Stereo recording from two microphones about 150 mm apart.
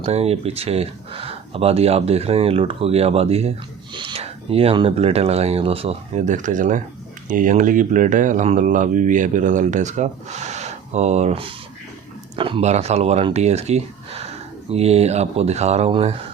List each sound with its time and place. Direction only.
0.0 s speech: 45° right (ahead or behind)